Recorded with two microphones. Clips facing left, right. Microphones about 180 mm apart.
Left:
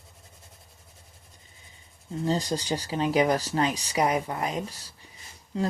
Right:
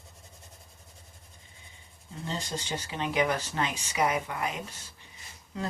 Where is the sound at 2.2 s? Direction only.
40° left (ahead or behind).